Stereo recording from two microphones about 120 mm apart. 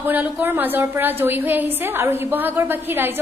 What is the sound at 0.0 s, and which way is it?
A woman's voice, 15° right (ahead or behind).